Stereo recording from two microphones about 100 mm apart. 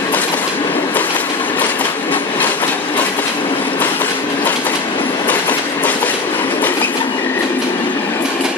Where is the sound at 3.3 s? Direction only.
55° left (ahead or behind).